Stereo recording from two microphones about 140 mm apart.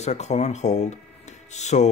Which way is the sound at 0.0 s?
50° left (ahead or behind).